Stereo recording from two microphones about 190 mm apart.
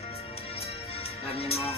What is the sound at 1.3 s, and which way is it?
Speech, 30° left (ahead or behind).